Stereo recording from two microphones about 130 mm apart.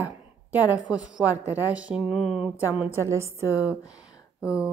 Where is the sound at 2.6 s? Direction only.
15° right (ahead or behind).